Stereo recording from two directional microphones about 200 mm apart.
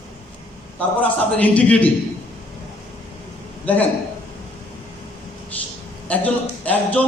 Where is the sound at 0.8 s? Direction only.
5° left (ahead or behind).